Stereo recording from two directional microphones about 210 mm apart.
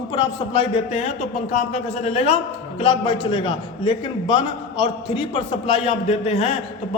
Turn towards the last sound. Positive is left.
turn(degrees=30)  # may be behind; listen again after turning